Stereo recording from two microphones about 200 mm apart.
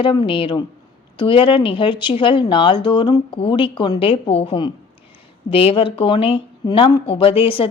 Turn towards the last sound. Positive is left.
turn(degrees=25)  # may be behind; listen again after turning